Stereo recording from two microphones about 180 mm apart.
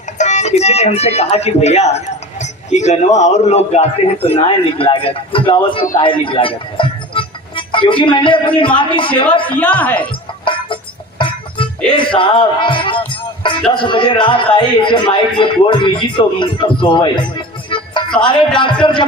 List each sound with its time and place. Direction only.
0.2 s speech: 40° left (ahead or behind)
9.6 s speech: 10° left (ahead or behind)
11.2 s music: 30° left (ahead or behind)
11.9 s a man's voice: 30° left (ahead or behind)
17.7 s music: 25° left (ahead or behind)
18.3 s a man's voice: 25° left (ahead or behind)